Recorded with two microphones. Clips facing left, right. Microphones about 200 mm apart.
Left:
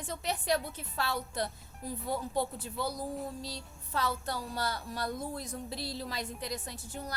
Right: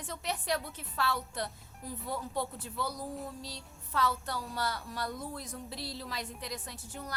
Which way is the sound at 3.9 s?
35° left (ahead or behind).